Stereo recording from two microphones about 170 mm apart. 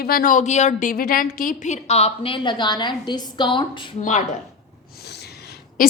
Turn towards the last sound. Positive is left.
turn(degrees=55)  # may be behind; listen again after turning